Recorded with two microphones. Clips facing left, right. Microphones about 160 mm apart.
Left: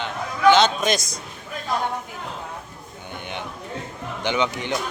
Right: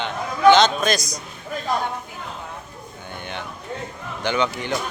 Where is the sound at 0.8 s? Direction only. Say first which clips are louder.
Right 1 dB; 25° left (ahead or behind).